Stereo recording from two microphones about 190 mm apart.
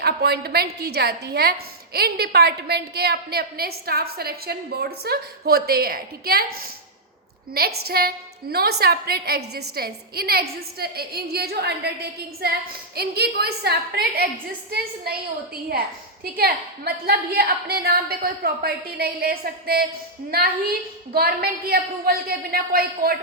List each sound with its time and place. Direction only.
0.0 s a woman's voice: 55° right (ahead or behind)
16.2 s a woman's voice: 50° right (ahead or behind)